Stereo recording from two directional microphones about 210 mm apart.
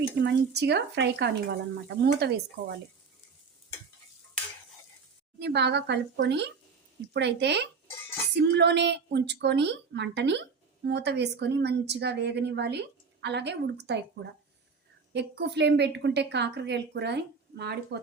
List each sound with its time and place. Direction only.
0.2 s a woman's voice: 55° right (ahead or behind)
5.4 s a woman's voice: 55° right (ahead or behind)